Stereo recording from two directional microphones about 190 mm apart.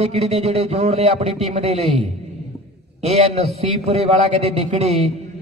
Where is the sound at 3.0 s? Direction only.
35° right (ahead or behind).